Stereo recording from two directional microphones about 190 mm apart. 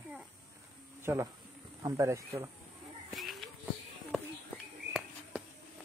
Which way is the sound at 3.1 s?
Centre (ahead or behind).